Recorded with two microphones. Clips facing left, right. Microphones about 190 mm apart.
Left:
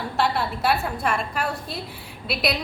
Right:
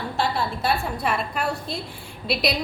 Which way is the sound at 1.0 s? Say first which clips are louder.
Right 1 dB; centre (ahead or behind).